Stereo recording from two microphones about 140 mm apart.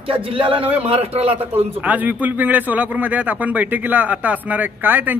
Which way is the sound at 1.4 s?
10° right (ahead or behind).